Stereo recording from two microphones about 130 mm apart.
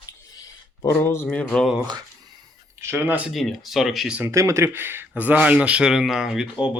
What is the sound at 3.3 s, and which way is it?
Speech, centre (ahead or behind).